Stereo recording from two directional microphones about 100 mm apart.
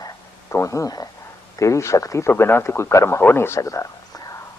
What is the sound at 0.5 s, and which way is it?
A man's voice, 30° left (ahead or behind).